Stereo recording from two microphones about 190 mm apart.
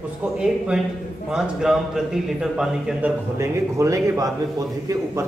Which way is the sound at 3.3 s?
15° right (ahead or behind).